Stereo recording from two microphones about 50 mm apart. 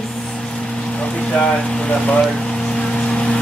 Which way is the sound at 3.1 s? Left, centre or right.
Left.